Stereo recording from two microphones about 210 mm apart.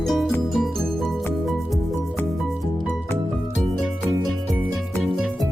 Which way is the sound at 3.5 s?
Centre (ahead or behind).